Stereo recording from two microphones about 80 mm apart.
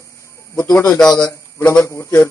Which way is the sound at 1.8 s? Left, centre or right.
Left.